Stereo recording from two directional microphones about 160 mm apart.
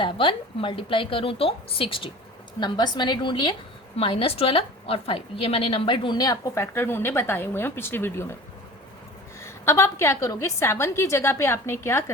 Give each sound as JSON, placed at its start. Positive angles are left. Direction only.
{"t": 0.0, "sound": "a woman's voice", "side_deg": 35}
{"t": 9.4, "sound": "a woman's voice", "side_deg": 15}